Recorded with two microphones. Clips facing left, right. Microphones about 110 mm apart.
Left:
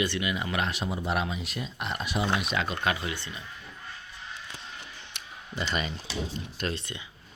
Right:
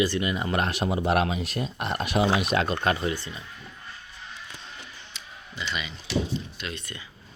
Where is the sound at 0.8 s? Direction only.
70° right (ahead or behind).